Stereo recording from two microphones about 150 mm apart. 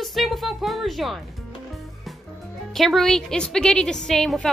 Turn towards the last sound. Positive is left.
turn(degrees=5)  # may be behind; listen again after turning